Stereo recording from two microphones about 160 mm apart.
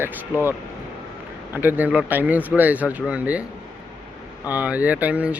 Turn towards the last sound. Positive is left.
turn(degrees=-10)  # may be behind; listen again after turning